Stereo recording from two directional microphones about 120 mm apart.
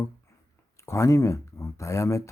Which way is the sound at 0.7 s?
25° left (ahead or behind).